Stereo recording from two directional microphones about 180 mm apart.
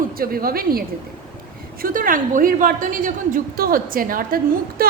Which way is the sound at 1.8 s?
50° right (ahead or behind).